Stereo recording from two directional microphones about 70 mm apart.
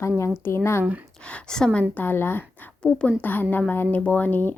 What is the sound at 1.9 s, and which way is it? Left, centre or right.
Speech, left.